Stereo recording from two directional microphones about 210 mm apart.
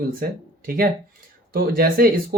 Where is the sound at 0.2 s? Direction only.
40° right (ahead or behind).